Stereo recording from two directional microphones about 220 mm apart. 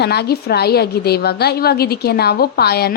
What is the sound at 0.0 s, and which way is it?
A woman's voice, 50° left (ahead or behind).